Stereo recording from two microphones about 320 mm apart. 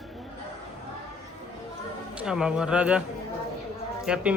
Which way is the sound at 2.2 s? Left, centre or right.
Centre.